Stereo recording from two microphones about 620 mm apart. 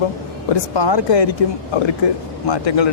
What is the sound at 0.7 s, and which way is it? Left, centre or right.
Speech, left.